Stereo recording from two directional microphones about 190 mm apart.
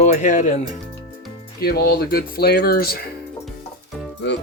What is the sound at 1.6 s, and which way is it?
Speech, 55° left (ahead or behind).